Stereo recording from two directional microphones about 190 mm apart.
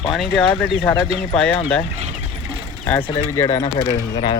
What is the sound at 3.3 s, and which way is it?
Speech, 15° left (ahead or behind).